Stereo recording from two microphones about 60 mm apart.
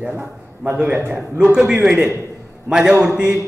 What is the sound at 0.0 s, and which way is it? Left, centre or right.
Speech, right.